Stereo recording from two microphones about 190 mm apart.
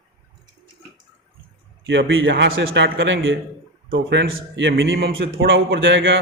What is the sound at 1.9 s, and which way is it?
A man's voice, 80° right.